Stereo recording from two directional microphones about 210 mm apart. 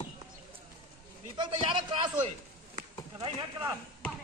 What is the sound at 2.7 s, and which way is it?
Chop, 25° right (ahead or behind).